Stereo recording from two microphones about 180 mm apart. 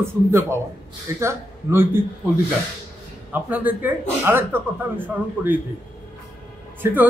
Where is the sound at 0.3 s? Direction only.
15° right (ahead or behind).